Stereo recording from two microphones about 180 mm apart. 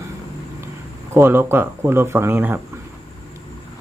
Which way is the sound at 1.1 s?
10° right (ahead or behind).